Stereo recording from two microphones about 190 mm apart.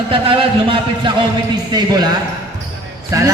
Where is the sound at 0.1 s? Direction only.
25° right (ahead or behind).